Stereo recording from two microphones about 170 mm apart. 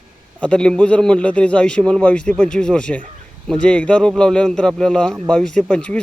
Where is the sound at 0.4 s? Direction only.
5° left (ahead or behind).